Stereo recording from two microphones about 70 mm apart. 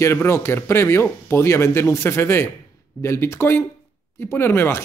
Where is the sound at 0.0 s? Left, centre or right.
Left.